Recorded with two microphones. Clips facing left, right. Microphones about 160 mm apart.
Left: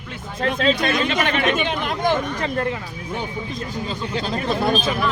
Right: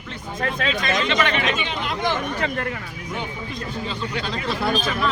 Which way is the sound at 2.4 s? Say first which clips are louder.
Left 3 dB; 35° left (ahead or behind).